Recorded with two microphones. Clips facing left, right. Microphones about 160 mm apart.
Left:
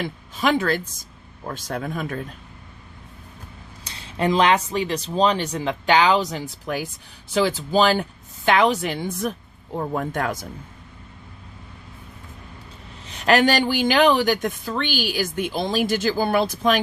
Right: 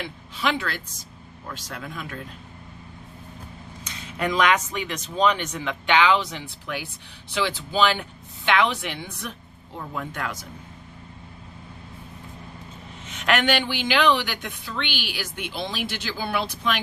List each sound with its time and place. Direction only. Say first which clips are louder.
0.0 s speech: left 4 dB; 45° left (ahead or behind)
3.8 s speech: left 5 dB; 30° left (ahead or behind)
13.1 s speech: left 5 dB; 35° left (ahead or behind)